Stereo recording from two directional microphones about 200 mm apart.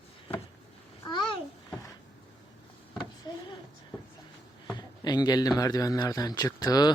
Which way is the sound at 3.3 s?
20° left (ahead or behind).